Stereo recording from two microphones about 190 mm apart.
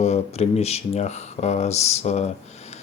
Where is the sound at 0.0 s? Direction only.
35° left (ahead or behind).